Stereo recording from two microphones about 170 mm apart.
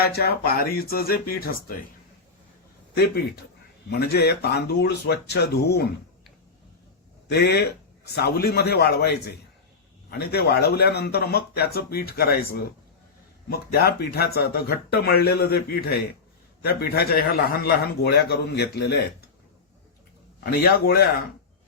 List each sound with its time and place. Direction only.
0.0 s speech: 65° left (ahead or behind)
3.8 s a man's voice: 70° left (ahead or behind)
7.3 s a man's voice: 70° left (ahead or behind)
20.4 s speech: 65° left (ahead or behind)